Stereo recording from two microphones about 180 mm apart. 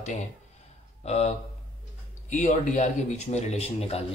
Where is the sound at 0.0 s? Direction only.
40° left (ahead or behind).